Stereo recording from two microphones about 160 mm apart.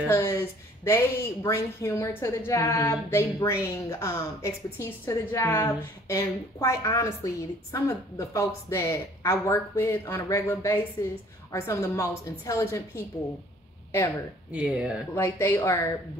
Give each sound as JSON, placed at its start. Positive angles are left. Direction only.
{"t": 0.1, "sound": "a woman's voice", "side_deg": 15}
{"t": 14.5, "sound": "speech", "side_deg": -5}
{"t": 15.1, "sound": "a woman's voice", "side_deg": 15}